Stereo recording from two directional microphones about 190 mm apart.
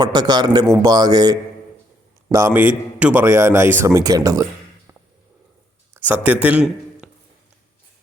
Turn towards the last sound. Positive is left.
turn(degrees=-5)  # may be behind; listen again after turning